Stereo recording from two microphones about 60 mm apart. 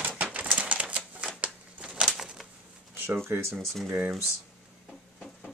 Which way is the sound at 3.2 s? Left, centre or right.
Right.